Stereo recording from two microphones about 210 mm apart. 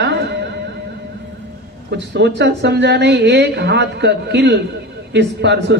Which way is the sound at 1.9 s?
55° right (ahead or behind).